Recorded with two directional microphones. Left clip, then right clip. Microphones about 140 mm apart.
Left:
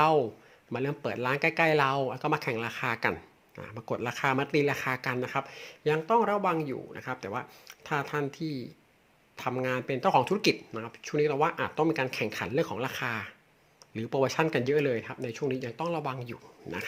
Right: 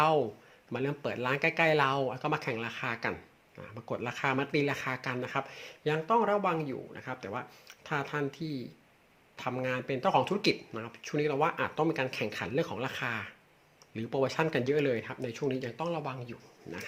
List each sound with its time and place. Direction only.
0.0 s speech: 25° left (ahead or behind); by 16.8 s 60° left (ahead or behind)